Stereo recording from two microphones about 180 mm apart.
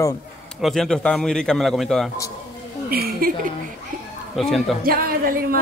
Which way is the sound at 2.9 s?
55° right (ahead or behind).